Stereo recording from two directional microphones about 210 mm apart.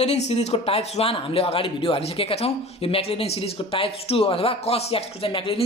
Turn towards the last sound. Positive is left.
turn(degrees=25)  # may be behind; listen again after turning